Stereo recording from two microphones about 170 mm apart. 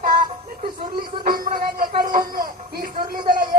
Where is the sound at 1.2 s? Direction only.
55° right (ahead or behind).